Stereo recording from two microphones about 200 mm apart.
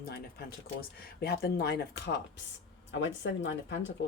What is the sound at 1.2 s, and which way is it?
Speech, 55° left (ahead or behind).